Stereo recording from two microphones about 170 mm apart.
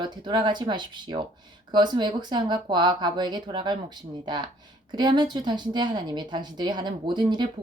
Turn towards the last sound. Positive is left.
turn(degrees=-25)  # may be behind; listen again after turning